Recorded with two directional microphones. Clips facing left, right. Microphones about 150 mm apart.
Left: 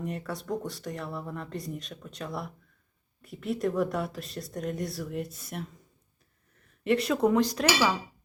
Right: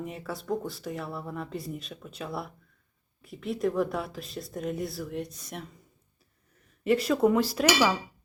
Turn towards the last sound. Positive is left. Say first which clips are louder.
# right 2 dB
turn(degrees=-5)  # may be behind; listen again after turning